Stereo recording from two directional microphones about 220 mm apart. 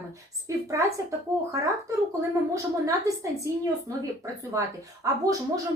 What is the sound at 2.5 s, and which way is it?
A woman's voice, 15° right (ahead or behind).